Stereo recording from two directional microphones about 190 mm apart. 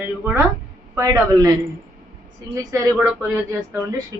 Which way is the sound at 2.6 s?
15° right (ahead or behind).